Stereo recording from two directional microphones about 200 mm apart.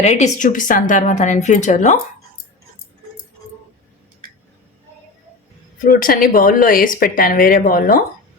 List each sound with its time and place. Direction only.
0.0 s speech: 35° left (ahead or behind)
5.8 s speech: 45° left (ahead or behind)